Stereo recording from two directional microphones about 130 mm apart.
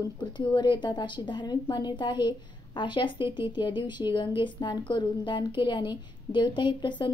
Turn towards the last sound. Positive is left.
turn(degrees=35)  # may be behind; listen again after turning